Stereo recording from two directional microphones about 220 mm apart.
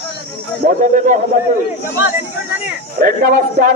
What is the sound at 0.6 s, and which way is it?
Speech, 35° right (ahead or behind).